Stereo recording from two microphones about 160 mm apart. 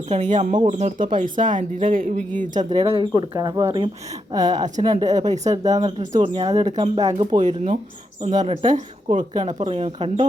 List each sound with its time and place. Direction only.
0.1 s speech: 45° right (ahead or behind)
2.7 s a woman's voice: 35° right (ahead or behind)
5.3 s speech: 45° right (ahead or behind)
6.0 s speech: 35° right (ahead or behind)
7.1 s a woman's voice: 30° right (ahead or behind)
7.4 s speech: 50° right (ahead or behind)